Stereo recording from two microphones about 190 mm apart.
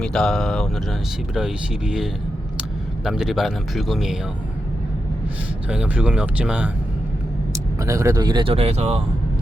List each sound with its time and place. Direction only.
0.0 s a man's voice: 5° left (ahead or behind)
5.6 s a man's voice: 5° right (ahead or behind)
7.5 s speech: 15° right (ahead or behind); by 9.0 s 35° right (ahead or behind)